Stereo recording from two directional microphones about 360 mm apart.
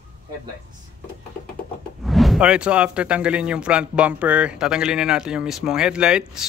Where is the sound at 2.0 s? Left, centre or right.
Centre.